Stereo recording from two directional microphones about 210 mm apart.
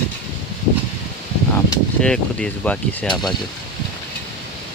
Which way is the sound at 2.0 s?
5° left (ahead or behind).